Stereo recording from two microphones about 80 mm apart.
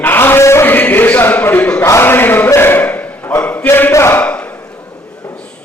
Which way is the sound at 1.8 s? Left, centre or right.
Left.